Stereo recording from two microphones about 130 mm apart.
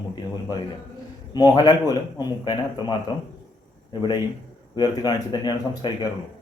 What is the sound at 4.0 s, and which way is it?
A man's voice, 35° left (ahead or behind).